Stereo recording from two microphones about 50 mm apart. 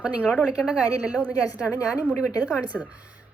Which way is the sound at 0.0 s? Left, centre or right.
Right.